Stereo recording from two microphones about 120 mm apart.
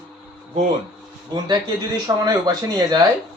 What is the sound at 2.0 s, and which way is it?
Speech, 30° right (ahead or behind).